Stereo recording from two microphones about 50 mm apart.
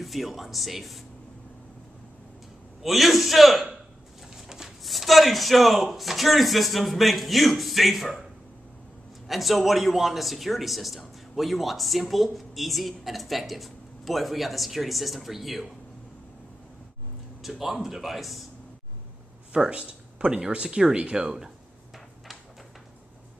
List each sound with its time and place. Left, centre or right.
0.0 s a man's voice: centre
2.8 s a man's voice: centre
4.4 s a sound: centre
4.8 s a man's voice: centre
9.3 s a man's voice: centre
17.4 s a man's voice: centre
19.5 s speech: centre
21.2 s speech: centre